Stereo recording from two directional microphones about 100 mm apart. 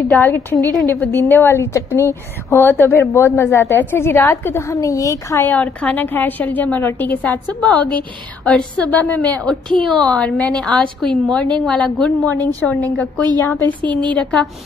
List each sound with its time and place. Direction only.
0.1 s a woman's voice: 20° left (ahead or behind)
5.4 s a woman's voice: 15° left (ahead or behind)